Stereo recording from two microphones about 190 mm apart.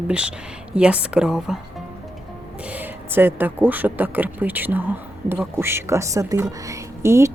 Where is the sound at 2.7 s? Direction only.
10° right (ahead or behind).